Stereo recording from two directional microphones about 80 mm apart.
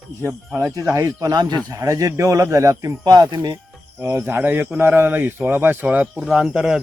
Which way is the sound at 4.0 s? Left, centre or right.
Right.